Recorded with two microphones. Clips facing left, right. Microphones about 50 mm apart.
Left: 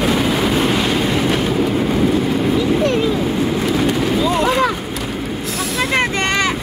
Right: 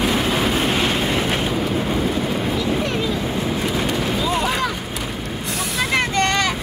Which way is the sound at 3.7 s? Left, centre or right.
Centre.